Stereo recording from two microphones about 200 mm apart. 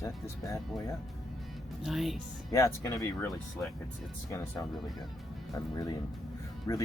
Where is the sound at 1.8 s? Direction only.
Centre (ahead or behind).